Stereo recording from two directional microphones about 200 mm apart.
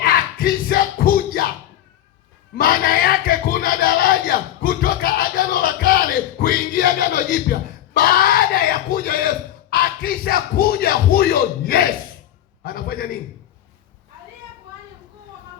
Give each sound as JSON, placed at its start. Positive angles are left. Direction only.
{"t": 0.0, "sound": "music", "side_deg": 45}
{"t": 2.6, "sound": "a sound", "side_deg": 45}
{"t": 7.9, "sound": "a man's voice", "side_deg": 45}